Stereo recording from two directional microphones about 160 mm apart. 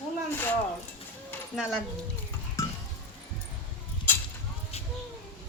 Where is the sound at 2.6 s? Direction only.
20° left (ahead or behind).